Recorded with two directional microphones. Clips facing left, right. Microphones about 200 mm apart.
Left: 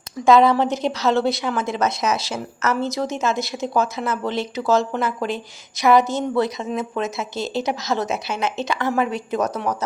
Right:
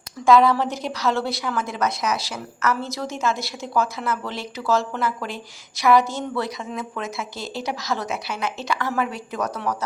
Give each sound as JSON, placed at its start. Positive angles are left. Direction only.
{"t": 0.3, "sound": "a woman's voice", "side_deg": 20}